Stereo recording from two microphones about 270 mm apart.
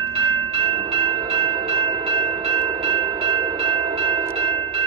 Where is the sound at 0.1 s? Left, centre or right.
Right.